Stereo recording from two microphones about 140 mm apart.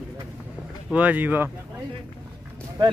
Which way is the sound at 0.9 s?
10° right (ahead or behind).